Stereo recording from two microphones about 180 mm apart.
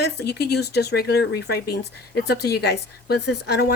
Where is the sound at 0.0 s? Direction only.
65° left (ahead or behind).